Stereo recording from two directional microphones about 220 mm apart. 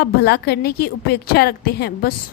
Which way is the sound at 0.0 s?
45° left (ahead or behind).